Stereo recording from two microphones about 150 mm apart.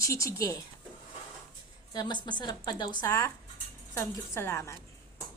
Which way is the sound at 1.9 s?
30° left (ahead or behind).